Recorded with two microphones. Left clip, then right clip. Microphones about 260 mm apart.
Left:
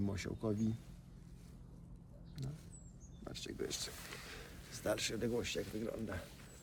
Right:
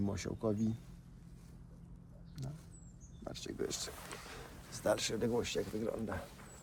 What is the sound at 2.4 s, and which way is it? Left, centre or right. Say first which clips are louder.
Speech: right 1 dB; centre.